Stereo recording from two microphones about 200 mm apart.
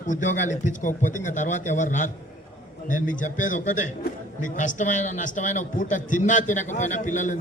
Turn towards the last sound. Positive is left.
turn(degrees=40)  # may be behind; listen again after turning